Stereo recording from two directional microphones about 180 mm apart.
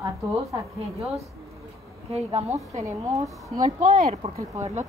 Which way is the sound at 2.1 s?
35° right (ahead or behind).